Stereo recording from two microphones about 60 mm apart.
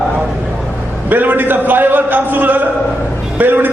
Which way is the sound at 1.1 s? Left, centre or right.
Right.